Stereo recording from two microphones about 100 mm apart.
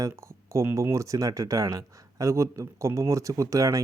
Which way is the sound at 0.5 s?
30° right (ahead or behind).